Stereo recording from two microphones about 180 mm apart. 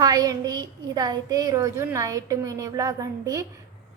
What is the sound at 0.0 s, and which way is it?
A woman's voice, 20° right (ahead or behind).